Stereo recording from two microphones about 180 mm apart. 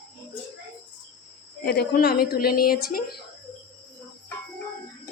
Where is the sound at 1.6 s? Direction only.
65° left (ahead or behind).